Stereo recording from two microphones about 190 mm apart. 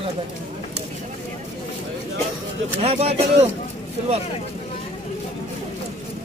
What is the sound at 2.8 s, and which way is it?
Speech, 35° right (ahead or behind).